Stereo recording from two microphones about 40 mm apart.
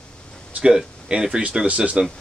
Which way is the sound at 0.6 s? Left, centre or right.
Centre.